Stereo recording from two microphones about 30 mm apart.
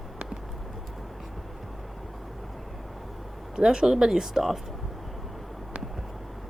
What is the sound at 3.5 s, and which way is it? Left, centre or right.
Speech, right.